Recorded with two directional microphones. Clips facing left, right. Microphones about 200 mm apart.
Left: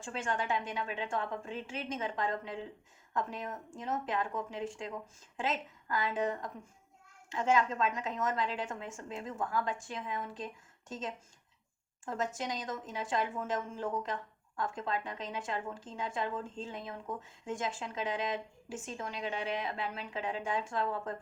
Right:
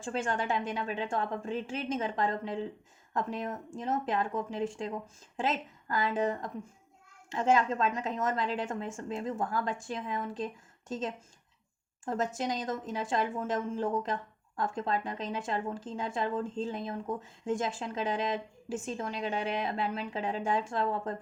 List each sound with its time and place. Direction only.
0.0 s a woman's voice: 35° right (ahead or behind)